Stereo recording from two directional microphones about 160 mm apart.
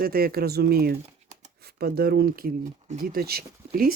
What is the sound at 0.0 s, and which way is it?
Speech, 65° right (ahead or behind).